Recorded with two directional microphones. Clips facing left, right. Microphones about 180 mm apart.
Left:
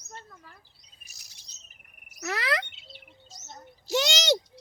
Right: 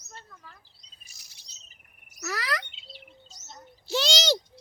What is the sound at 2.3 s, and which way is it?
Speech, 25° left (ahead or behind).